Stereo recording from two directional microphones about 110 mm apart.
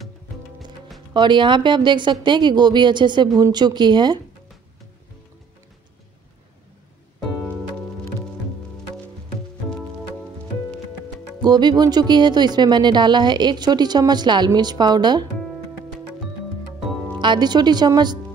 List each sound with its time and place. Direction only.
1.1 s speech: 45° right (ahead or behind)
11.4 s speech: 40° right (ahead or behind)
17.2 s speech: 45° right (ahead or behind)